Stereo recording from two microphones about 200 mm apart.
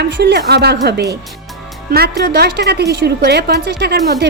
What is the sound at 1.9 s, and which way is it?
A woman's voice, 50° right (ahead or behind).